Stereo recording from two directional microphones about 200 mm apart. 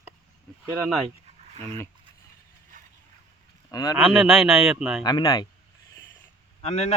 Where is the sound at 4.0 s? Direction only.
5° right (ahead or behind).